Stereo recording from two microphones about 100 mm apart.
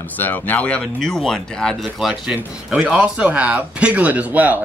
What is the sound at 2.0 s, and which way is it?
Speech, 5° right (ahead or behind).